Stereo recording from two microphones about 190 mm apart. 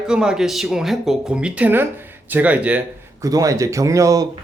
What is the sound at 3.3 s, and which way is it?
Speech, 20° right (ahead or behind).